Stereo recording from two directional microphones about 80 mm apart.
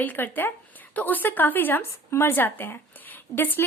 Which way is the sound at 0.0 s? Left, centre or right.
Left.